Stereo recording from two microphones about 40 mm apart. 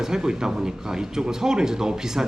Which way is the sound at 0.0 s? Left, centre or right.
Centre.